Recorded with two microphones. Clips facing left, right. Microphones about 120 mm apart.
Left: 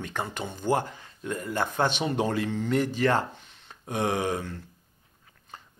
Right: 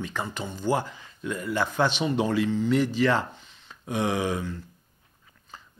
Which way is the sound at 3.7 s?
50° left (ahead or behind).